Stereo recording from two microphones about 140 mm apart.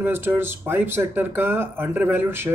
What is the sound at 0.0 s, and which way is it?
A man's voice, 15° right (ahead or behind).